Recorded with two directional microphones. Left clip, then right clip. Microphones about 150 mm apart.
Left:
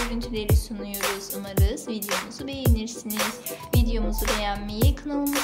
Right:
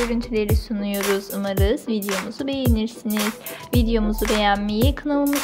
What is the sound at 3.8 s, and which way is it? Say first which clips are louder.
A woman's voice: right 7 dB; 50° right (ahead or behind).